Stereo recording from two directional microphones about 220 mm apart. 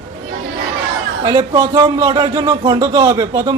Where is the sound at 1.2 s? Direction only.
20° right (ahead or behind).